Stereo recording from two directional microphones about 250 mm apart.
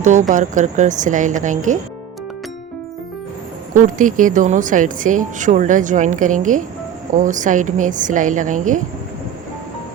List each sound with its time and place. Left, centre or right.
0.0 s a woman's voice: right
3.8 s a woman's voice: right